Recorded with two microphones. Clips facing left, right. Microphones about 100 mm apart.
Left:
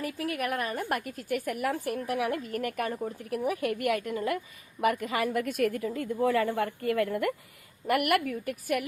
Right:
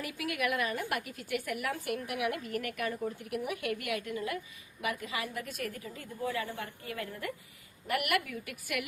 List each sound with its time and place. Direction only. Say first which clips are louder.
0.0 s a woman's voice: left 3 dB; 35° left (ahead or behind); by 7.3 s 60° left (ahead or behind)
7.9 s a woman's voice: left 6 dB; 45° left (ahead or behind)